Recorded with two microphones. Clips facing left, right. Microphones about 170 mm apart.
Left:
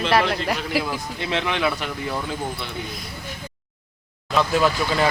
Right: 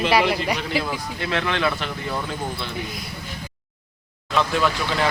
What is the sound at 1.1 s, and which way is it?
Speech, 20° left (ahead or behind).